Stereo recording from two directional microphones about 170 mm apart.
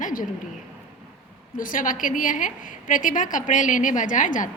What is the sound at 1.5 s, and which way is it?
A woman's voice, 55° left (ahead or behind).